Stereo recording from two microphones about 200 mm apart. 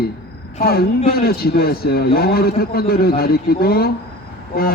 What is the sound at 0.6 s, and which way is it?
A man's voice, 50° left (ahead or behind).